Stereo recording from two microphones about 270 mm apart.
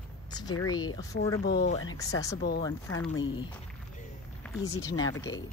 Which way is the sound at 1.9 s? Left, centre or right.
Centre.